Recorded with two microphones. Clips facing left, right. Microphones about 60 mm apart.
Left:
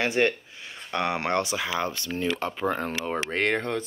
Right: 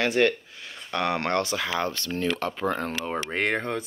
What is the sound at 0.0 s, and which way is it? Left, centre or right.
Speech, left.